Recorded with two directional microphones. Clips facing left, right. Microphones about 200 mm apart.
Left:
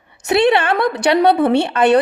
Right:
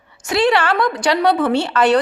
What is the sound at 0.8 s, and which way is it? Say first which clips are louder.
Speech: left 2 dB; 65° left (ahead or behind).